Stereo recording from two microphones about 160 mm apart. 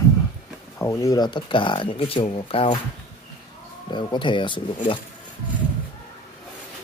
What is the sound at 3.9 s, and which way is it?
Speech, 30° left (ahead or behind).